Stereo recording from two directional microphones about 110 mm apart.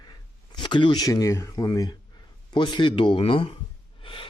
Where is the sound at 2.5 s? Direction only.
45° left (ahead or behind).